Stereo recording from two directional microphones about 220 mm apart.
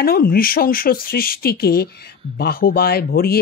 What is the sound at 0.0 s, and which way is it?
Speech, 45° left (ahead or behind).